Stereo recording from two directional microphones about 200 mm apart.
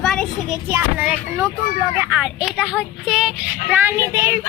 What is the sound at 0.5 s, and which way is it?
Speech, 10° right (ahead or behind).